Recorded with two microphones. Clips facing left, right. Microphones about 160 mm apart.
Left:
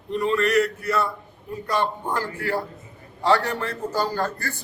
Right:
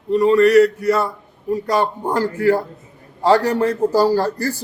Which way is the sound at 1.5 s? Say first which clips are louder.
Right 6 dB; 40° right (ahead or behind).